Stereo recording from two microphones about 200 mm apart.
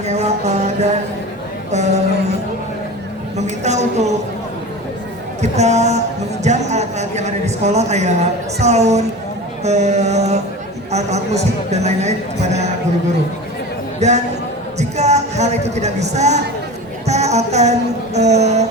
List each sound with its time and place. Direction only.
0.0 s a man's voice: 35° right (ahead or behind)
3.3 s a sound: 35° right (ahead or behind)
5.4 s a man's voice: 35° right (ahead or behind)
14.0 s a man's voice: 35° right (ahead or behind)